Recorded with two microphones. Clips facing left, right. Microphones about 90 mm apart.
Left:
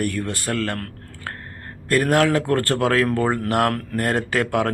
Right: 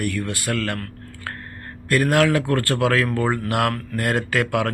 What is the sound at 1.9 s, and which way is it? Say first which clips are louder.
A man's voice: even; 35° left (ahead or behind).